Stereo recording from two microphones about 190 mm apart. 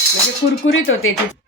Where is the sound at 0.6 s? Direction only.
90° left.